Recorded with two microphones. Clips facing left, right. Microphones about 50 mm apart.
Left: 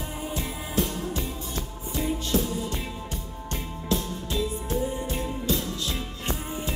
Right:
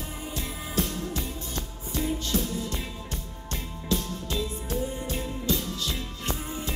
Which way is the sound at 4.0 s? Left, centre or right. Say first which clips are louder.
Left 2 dB; centre.